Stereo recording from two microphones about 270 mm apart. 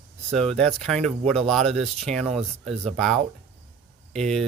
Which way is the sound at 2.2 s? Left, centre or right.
Right.